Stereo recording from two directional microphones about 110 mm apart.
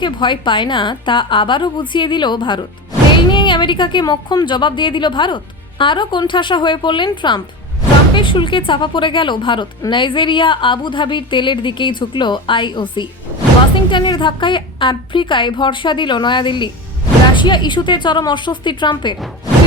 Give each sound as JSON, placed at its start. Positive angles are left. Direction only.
{"t": 0.0, "sound": "speech", "side_deg": 45}